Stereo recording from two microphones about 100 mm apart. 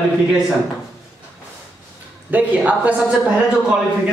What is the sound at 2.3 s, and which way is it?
Speech, 15° right (ahead or behind).